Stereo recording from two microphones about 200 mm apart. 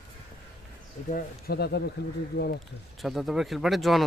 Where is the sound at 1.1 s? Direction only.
50° left (ahead or behind).